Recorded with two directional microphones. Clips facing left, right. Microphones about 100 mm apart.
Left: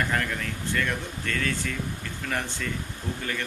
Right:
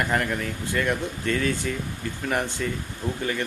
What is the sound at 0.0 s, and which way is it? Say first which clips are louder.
Speech: right 3 dB; 15° right (ahead or behind).